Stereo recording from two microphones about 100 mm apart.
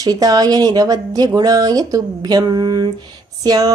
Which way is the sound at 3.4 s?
40° right (ahead or behind).